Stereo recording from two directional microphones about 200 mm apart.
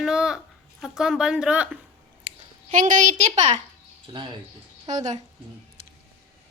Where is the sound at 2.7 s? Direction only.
40° right (ahead or behind).